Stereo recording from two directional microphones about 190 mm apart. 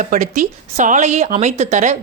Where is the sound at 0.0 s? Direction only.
40° right (ahead or behind).